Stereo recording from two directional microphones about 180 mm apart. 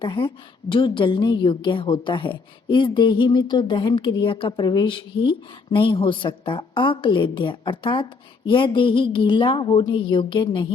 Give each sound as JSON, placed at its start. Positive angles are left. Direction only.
{"t": 0.0, "sound": "a woman's voice", "side_deg": 30}